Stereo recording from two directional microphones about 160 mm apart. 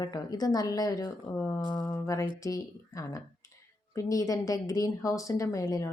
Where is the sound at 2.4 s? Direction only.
20° left (ahead or behind).